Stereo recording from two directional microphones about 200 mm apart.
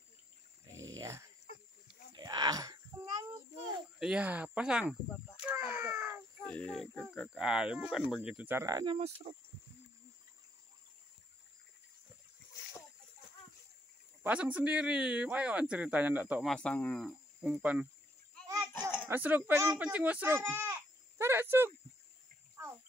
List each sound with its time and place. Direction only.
0.9 s dog: 15° right (ahead or behind)
2.1 s a sound: 20° right (ahead or behind)
4.0 s speech: 5° right (ahead or behind)
5.5 s a sound: 10° right (ahead or behind)
6.4 s speech: 5° left (ahead or behind); by 8.9 s 20° right (ahead or behind)
8.9 s speech: 30° right (ahead or behind)
14.2 s speech: 5° right (ahead or behind)
16.5 s speech: 5° left (ahead or behind)
17.4 s speech: 5° right (ahead or behind)
18.7 s a sound: 10° left (ahead or behind)
19.0 s speech: 10° right (ahead or behind)
21.2 s a sound: 10° right (ahead or behind)